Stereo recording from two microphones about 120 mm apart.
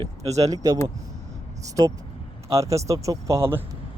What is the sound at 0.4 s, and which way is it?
Speech, 30° right (ahead or behind).